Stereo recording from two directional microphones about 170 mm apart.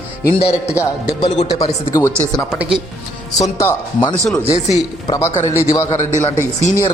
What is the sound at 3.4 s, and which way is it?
Speech, 20° left (ahead or behind).